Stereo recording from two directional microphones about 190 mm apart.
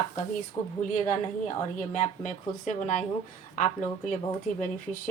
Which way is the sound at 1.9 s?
40° left (ahead or behind).